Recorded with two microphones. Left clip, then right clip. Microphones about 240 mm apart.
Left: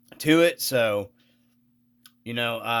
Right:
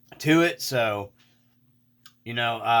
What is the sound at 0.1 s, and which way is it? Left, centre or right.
Speech, left.